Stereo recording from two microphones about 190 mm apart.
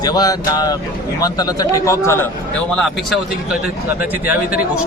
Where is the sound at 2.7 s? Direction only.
Centre (ahead or behind).